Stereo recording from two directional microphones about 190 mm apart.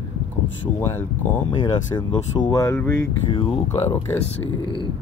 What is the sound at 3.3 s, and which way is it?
Speech, 30° left (ahead or behind).